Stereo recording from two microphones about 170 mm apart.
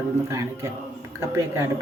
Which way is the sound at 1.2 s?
15° right (ahead or behind).